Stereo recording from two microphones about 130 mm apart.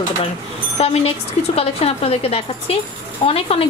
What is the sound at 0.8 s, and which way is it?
A woman's voice, 50° left (ahead or behind).